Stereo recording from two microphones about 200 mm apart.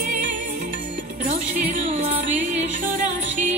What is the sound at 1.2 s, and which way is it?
Music, 35° right (ahead or behind).